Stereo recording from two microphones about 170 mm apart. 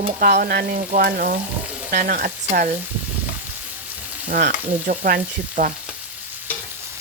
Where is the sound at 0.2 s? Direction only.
55° right (ahead or behind).